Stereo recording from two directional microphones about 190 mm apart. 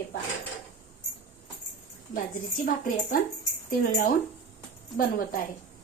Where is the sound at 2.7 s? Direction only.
45° left (ahead or behind).